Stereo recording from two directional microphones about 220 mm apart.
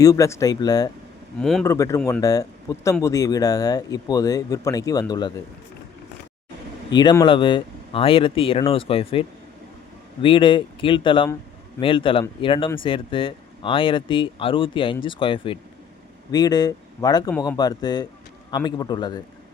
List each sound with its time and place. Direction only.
0.0 s speech: 15° left (ahead or behind)
1.4 s speech: centre (ahead or behind)
1.6 s speech: 15° left (ahead or behind)
6.9 s speech: 20° left (ahead or behind)